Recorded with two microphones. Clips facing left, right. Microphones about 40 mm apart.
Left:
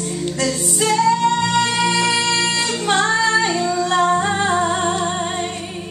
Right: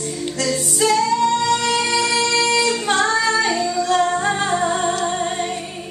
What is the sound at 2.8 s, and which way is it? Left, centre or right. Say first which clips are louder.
Singing: left 1 dB; left.